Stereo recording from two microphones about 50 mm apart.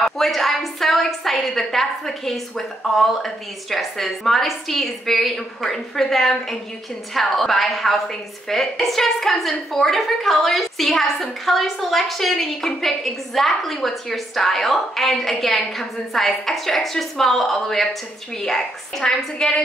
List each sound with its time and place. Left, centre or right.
0.0 s a woman's voice: centre